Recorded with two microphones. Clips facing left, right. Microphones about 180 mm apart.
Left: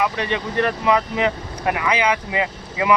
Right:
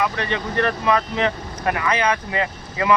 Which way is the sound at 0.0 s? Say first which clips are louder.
Left 1 dB; 15° left (ahead or behind).